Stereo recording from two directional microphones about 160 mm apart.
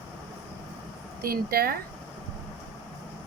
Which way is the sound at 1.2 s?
70° right (ahead or behind).